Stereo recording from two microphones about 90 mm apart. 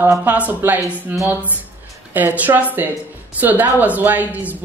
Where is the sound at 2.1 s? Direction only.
20° right (ahead or behind).